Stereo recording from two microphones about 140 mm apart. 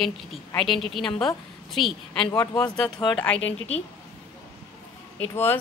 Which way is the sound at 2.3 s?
25° left (ahead or behind).